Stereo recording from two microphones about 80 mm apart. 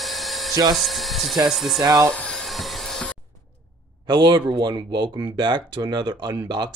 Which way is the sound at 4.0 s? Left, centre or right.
Right.